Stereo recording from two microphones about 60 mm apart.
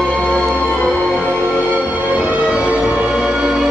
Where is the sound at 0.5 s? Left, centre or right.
Left.